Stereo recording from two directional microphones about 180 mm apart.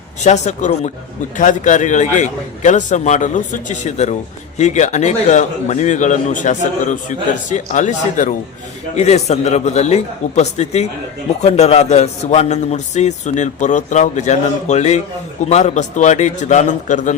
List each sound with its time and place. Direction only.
0.3 s a man's voice: 40° left (ahead or behind)